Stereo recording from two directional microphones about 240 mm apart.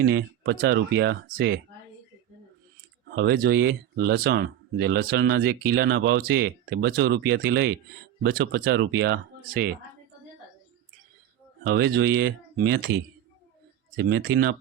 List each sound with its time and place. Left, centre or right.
0.0 s speech: right
3.2 s speech: right
11.6 s speech: right